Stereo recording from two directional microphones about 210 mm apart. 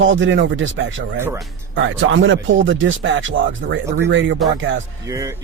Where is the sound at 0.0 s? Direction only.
65° right (ahead or behind).